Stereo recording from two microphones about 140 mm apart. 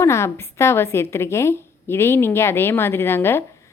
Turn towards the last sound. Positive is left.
turn(degrees=15)  # may be behind; listen again after turning